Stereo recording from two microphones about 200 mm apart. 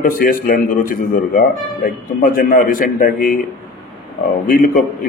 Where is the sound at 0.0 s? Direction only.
45° left (ahead or behind).